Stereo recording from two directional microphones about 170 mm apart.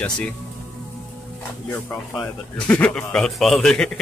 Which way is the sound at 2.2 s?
5° left (ahead or behind).